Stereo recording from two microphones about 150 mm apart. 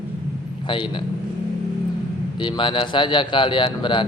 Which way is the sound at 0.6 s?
35° left (ahead or behind).